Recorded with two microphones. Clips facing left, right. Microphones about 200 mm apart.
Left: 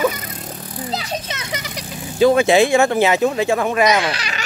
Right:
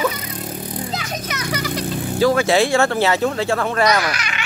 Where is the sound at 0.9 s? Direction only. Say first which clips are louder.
Left 1 dB; 30° left (ahead or behind).